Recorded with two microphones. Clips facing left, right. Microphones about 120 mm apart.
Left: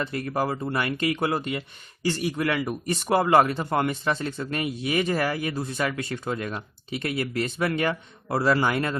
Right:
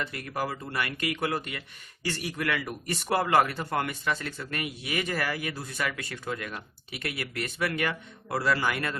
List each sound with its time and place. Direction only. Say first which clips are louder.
0.0 s speech: left 6 dB; 30° left (ahead or behind)